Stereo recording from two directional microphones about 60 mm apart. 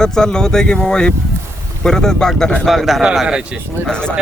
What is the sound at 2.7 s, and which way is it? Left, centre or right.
Speech, centre.